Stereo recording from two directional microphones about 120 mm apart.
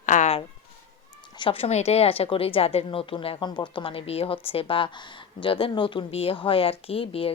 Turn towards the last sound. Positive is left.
turn(degrees=50)  # may be behind; listen again after turning